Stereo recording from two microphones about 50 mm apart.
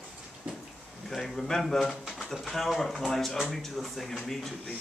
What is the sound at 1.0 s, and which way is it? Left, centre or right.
A man's voice, centre.